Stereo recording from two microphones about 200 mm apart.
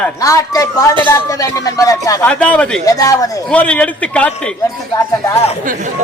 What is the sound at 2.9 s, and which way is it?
Speech, 15° left (ahead or behind).